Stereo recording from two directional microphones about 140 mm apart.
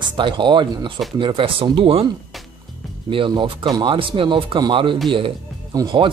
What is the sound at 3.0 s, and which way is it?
Speech, 35° right (ahead or behind).